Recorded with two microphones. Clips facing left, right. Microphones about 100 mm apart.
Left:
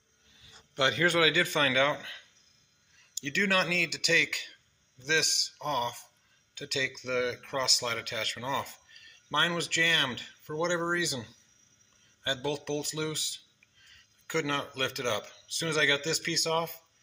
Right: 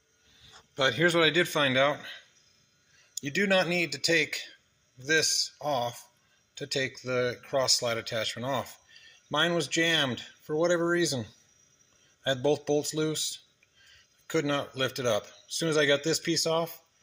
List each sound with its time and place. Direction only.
0.7 s a man's voice: 20° right (ahead or behind)
5.6 s a man's voice: 5° right (ahead or behind)
6.5 s a man's voice: 20° right (ahead or behind)
12.2 s speech: 30° right (ahead or behind)
14.3 s speech: 20° right (ahead or behind)